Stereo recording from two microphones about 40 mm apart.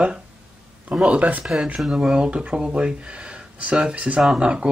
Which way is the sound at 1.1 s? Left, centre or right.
Right.